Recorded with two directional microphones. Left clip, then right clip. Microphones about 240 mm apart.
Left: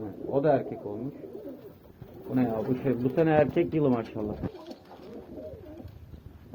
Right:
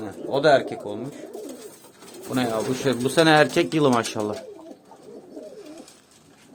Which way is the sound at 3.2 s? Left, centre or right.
Right.